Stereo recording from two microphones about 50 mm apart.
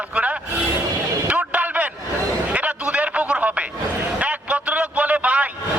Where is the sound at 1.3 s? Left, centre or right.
Right.